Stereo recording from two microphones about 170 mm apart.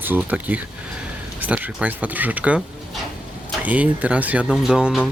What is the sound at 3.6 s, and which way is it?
Speech, 10° right (ahead or behind).